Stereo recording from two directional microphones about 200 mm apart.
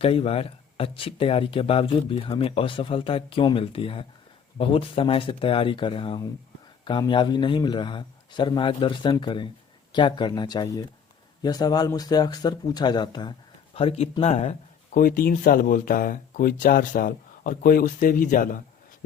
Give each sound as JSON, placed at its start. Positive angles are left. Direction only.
{"t": 0.0, "sound": "speech", "side_deg": 30}
{"t": 14.9, "sound": "speech", "side_deg": 45}